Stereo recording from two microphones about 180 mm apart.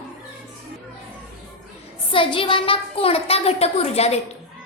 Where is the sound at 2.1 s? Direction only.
30° left (ahead or behind).